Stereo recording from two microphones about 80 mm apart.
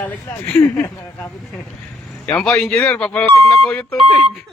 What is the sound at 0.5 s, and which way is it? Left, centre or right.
Speech, left.